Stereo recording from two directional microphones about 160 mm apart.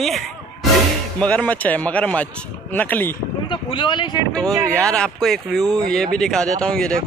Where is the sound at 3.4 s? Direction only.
30° left (ahead or behind).